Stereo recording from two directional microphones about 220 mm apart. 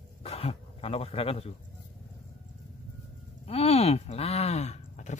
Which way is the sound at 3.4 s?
30° left (ahead or behind).